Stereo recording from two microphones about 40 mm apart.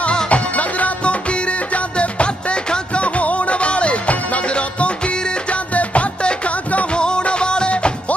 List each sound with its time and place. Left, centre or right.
0.0 s music: left
5.7 s music: left
7.0 s music: left